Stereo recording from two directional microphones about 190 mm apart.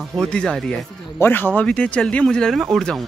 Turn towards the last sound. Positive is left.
turn(degrees=0)  # may be behind; listen again after turning